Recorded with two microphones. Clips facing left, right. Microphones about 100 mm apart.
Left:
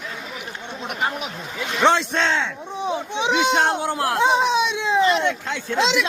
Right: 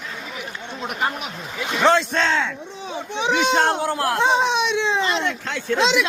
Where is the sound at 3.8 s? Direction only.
15° left (ahead or behind).